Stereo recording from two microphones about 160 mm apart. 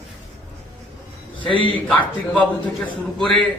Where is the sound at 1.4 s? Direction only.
30° left (ahead or behind).